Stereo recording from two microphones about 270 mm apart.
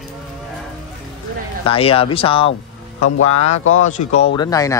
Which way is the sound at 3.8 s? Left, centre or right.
Left.